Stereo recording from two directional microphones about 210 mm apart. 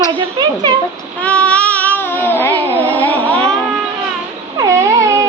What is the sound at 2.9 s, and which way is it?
Carnatic music, 10° left (ahead or behind).